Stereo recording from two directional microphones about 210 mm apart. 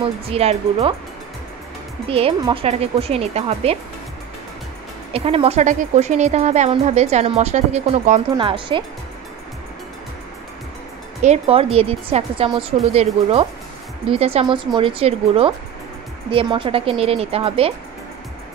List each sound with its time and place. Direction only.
0.0 s speech: 30° right (ahead or behind)
2.0 s speech: 25° right (ahead or behind)
5.1 s a woman's voice: 25° right (ahead or behind)
11.2 s speech: 30° right (ahead or behind)